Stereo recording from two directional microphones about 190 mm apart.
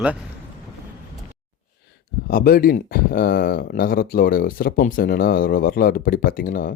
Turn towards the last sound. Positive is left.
turn(degrees=50)  # may be behind; listen again after turning